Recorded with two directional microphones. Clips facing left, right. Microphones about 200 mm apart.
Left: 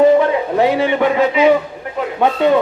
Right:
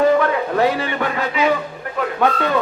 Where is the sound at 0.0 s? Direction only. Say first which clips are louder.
Left 4 dB; 20° left (ahead or behind).